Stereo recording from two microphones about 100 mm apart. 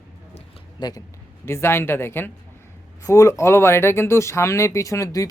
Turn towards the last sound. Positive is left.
turn(degrees=35)  # may be behind; listen again after turning